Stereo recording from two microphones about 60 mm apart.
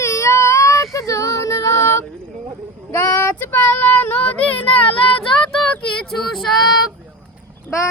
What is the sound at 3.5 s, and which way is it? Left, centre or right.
Child singing, left.